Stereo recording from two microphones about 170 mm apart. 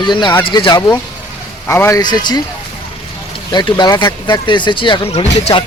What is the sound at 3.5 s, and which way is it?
Speech, 25° left (ahead or behind).